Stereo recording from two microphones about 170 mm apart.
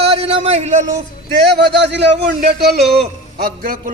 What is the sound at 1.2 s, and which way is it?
Speech, 85° right.